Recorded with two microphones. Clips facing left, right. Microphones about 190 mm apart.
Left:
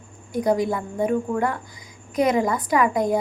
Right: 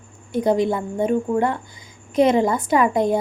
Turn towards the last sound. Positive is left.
turn(degrees=-25)  # may be behind; listen again after turning